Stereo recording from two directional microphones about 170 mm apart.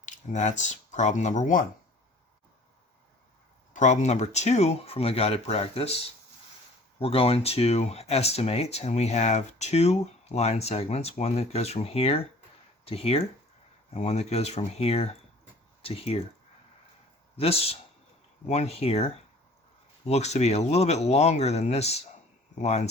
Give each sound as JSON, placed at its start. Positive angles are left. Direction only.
{"t": 0.0, "sound": "speech", "side_deg": 45}
{"t": 3.7, "sound": "speech", "side_deg": 45}
{"t": 7.0, "sound": "speech", "side_deg": 35}
{"t": 17.3, "sound": "speech", "side_deg": 35}